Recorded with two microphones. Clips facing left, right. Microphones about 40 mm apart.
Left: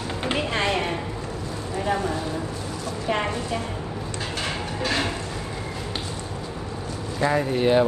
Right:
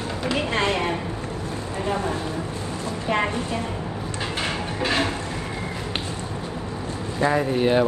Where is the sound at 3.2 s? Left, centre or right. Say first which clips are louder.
Right 2 dB; right.